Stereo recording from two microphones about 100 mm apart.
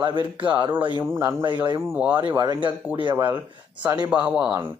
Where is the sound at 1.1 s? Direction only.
25° right (ahead or behind).